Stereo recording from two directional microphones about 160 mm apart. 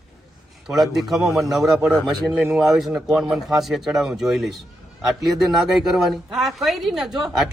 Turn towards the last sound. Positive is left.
turn(degrees=0)  # may be behind; listen again after turning